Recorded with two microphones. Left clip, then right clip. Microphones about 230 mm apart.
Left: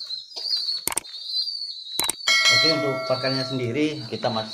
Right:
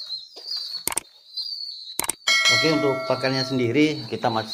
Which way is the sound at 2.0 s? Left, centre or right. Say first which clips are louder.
Left 1 dB; centre.